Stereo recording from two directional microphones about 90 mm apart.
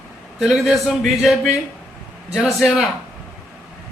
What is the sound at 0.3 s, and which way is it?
Speech, centre (ahead or behind).